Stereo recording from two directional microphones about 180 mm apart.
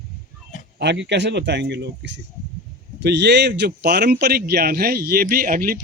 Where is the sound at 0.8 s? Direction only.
75° right (ahead or behind); by 5.8 s 50° right (ahead or behind).